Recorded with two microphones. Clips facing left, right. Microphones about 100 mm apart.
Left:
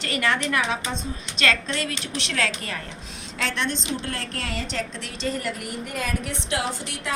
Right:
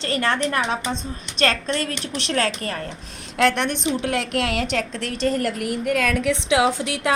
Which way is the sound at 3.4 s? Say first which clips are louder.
Right 8 dB; 55° right (ahead or behind).